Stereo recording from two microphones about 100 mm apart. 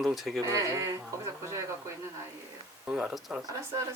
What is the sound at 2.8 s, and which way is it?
Speech, 10° right (ahead or behind).